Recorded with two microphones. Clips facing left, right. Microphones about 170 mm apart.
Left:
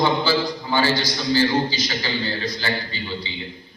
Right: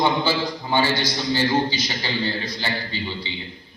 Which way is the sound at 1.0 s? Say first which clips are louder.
Left 2 dB; 25° right (ahead or behind).